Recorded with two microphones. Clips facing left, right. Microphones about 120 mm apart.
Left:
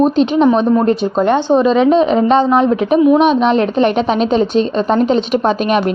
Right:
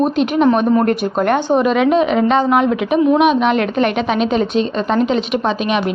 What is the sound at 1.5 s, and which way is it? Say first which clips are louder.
A woman's voice: left 3 dB; 25° left (ahead or behind).